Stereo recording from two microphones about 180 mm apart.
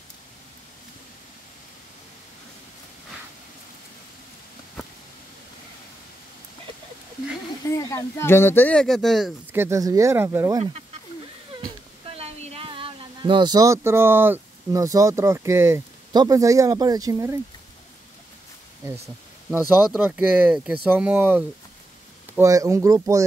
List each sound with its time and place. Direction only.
7.6 s speech: 15° left (ahead or behind); by 9.3 s centre (ahead or behind)
9.5 s speech: 15° right (ahead or behind)
12.1 s speech: 35° right (ahead or behind); by 17.4 s 15° right (ahead or behind)
19.7 s speech: 10° right (ahead or behind)